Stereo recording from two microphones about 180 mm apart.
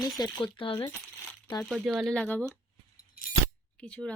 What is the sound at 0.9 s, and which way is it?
Coin, 5° left (ahead or behind).